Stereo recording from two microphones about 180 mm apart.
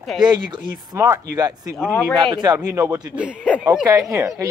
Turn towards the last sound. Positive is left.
turn(degrees=-15)  # may be behind; listen again after turning